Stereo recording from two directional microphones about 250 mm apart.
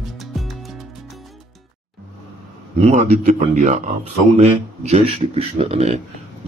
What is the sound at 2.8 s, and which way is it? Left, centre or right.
Speech, right.